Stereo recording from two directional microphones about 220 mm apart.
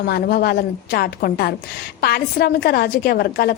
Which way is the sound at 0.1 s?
45° left (ahead or behind).